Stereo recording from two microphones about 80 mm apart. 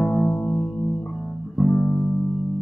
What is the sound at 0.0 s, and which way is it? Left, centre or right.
Music, centre.